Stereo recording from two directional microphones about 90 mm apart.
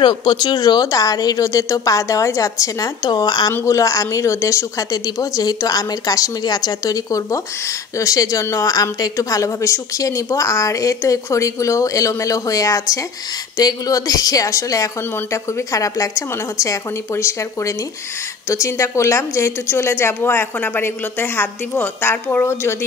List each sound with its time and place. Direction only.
0.0 s a woman's voice: 60° left (ahead or behind); by 22.8 s 30° left (ahead or behind)